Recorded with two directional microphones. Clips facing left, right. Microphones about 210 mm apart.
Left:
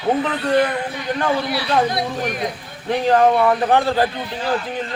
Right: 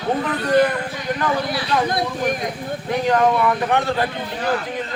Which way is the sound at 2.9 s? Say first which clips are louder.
Left 3 dB; 30° left (ahead or behind).